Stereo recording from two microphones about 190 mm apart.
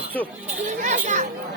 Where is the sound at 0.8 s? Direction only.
40° right (ahead or behind).